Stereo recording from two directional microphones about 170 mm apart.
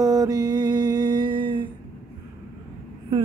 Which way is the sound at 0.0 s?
20° right (ahead or behind).